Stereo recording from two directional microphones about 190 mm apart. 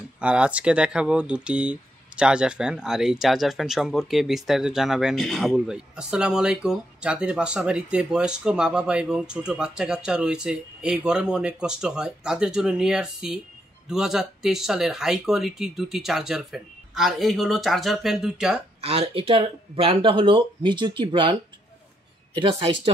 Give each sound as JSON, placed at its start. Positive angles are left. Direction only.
{"t": 0.2, "sound": "speech", "side_deg": -5}
{"t": 18.8, "sound": "speech", "side_deg": -30}